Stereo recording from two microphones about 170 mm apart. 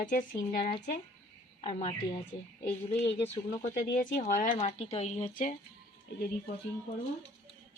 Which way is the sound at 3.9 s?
65° left (ahead or behind).